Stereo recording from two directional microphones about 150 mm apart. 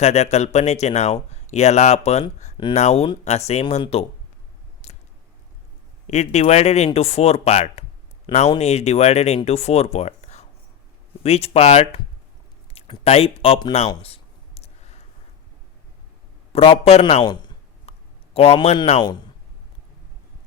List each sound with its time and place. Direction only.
0.0 s speech: 45° left (ahead or behind)
4.8 s squish: 45° left (ahead or behind)
6.1 s speech: 50° left (ahead or behind)
13.7 s a sound: 40° left (ahead or behind)
16.5 s a man's voice: 40° left (ahead or behind)
17.9 s a sound: 40° left (ahead or behind)
18.3 s speech: 40° left (ahead or behind)